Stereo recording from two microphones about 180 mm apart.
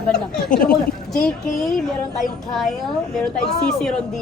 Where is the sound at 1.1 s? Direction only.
Centre (ahead or behind).